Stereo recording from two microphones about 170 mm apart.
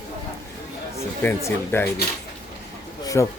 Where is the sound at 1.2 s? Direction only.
10° left (ahead or behind).